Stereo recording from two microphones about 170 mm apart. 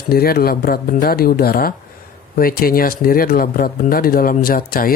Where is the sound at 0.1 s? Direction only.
65° left (ahead or behind).